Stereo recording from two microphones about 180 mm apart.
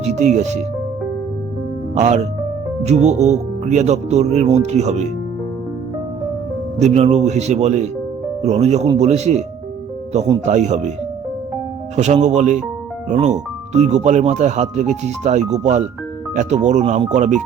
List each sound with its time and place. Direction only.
0.0 s speech: 40° right (ahead or behind)
2.0 s speech: 40° right (ahead or behind)
6.7 s speech: 35° right (ahead or behind)
10.4 s speech: 40° right (ahead or behind)
11.9 s speech: 40° right (ahead or behind)